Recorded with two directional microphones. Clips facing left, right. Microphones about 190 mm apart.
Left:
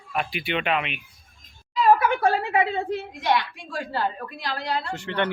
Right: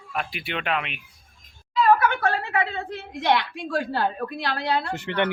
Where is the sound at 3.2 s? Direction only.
65° right (ahead or behind).